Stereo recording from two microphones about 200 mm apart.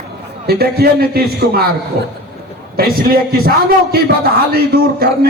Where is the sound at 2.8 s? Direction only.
50° right (ahead or behind).